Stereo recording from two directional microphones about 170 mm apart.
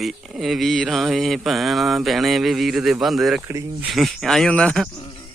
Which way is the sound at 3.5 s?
15° right (ahead or behind).